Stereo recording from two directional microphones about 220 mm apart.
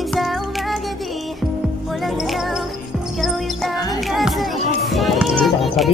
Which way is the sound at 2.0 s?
Centre (ahead or behind).